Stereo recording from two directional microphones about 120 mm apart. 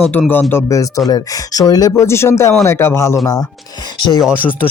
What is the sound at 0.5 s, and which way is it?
Speech, 25° left (ahead or behind).